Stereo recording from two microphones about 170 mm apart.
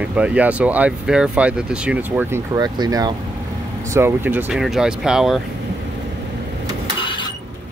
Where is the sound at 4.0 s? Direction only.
15° right (ahead or behind).